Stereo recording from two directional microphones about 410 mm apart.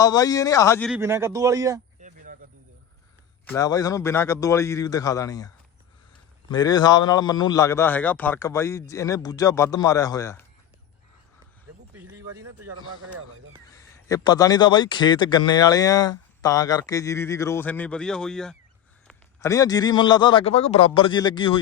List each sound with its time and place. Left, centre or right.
0.0 s speech: centre
2.0 s insect: centre
3.4 s a man's voice: centre
6.5 s a man's voice: centre
12.1 s speech: centre
13.7 s a man's voice: centre